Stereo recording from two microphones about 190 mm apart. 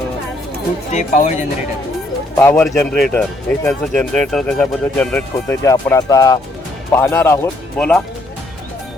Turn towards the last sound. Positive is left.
turn(degrees=10)  # may be behind; listen again after turning